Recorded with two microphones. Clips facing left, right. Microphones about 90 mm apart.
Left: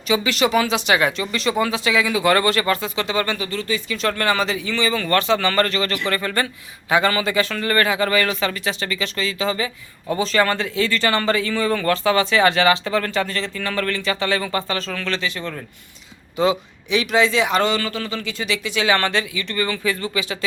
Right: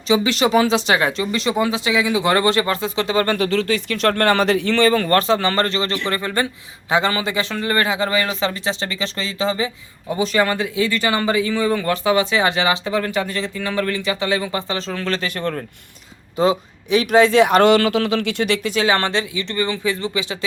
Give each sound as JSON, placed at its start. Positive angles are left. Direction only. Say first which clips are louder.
{"t": 0.1, "sound": "speech", "louder": "right 2 dB", "side_deg": -30}
{"t": 3.3, "sound": "speech", "louder": "right 6 dB", "side_deg": -80}
{"t": 10.1, "sound": "speech", "louder": "even", "side_deg": -15}
{"t": 15.0, "sound": "speech", "louder": "right 3 dB", "side_deg": -45}
{"t": 16.4, "sound": "a man's voice", "louder": "right 2 dB", "side_deg": -40}